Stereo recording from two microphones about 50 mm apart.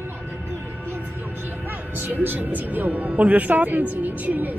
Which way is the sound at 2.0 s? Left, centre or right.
Right.